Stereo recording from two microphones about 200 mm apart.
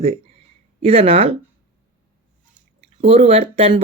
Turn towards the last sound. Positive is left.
turn(degrees=-30)  # may be behind; listen again after turning